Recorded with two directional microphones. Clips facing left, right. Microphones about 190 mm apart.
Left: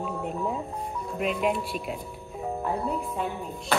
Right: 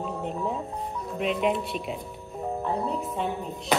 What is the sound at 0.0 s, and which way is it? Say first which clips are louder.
Music: even; 5° left (ahead or behind).